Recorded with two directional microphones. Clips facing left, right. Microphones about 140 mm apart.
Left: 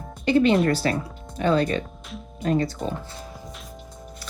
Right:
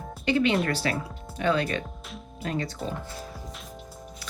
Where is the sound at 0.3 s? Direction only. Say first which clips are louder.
Left 5 dB; 40° left (ahead or behind).